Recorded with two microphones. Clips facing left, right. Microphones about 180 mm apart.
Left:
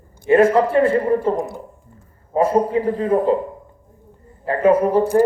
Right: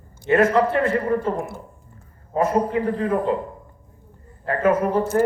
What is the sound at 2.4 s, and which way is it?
Speech, 30° left (ahead or behind).